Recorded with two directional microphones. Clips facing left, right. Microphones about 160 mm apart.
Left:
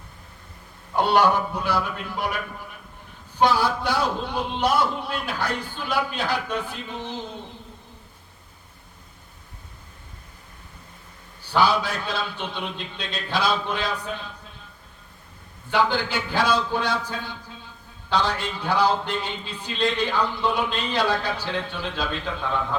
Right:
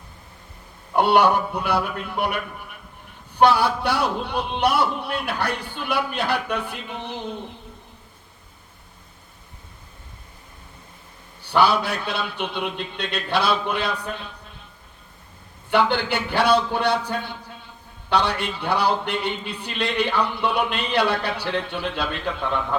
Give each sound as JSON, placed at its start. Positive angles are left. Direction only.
{"t": 0.9, "sound": "a man's voice", "side_deg": -60}
{"t": 3.4, "sound": "a man's voice", "side_deg": -65}
{"t": 11.4, "sound": "a man's voice", "side_deg": -60}
{"t": 15.7, "sound": "a man's voice", "side_deg": -60}